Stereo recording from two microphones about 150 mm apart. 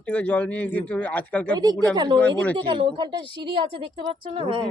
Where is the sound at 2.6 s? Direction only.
35° right (ahead or behind).